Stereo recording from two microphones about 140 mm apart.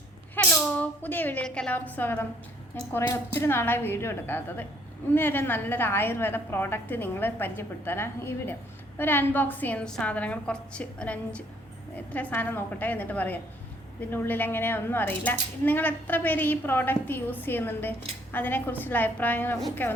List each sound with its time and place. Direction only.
0.3 s speech: 10° left (ahead or behind)